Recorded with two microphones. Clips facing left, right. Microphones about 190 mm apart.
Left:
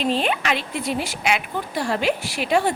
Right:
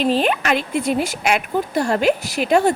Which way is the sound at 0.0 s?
45° right (ahead or behind).